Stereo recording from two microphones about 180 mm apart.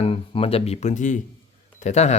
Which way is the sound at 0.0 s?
30° left (ahead or behind).